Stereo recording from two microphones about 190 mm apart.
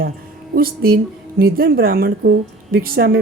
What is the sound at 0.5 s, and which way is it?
A woman's voice, 50° right (ahead or behind).